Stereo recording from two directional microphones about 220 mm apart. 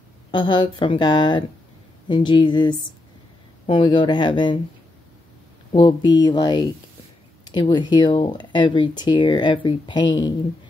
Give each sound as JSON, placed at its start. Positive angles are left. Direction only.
{"t": 0.3, "sound": "speech", "side_deg": 20}
{"t": 5.7, "sound": "speech", "side_deg": 20}